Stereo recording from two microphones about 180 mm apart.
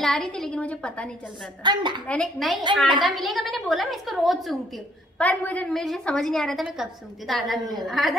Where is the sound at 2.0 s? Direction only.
5° left (ahead or behind).